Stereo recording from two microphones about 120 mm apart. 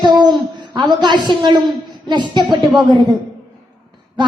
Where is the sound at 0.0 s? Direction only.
40° right (ahead or behind).